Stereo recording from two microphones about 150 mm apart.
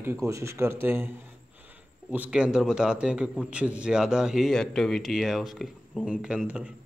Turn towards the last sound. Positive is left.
turn(degrees=-5)  # may be behind; listen again after turning